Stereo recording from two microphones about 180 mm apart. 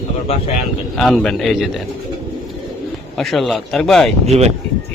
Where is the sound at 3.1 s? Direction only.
Centre (ahead or behind).